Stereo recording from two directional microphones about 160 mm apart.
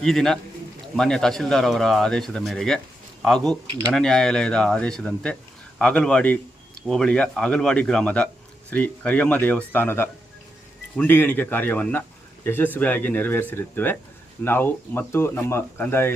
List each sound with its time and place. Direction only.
0.0 s speech: centre (ahead or behind)
3.7 s speech: 30° right (ahead or behind)
3.9 s speech: 5° left (ahead or behind)